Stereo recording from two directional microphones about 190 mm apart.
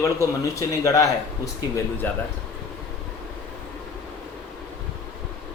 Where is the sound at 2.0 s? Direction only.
10° left (ahead or behind).